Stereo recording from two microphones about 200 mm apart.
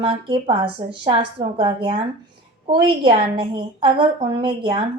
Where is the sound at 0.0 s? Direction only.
25° right (ahead or behind).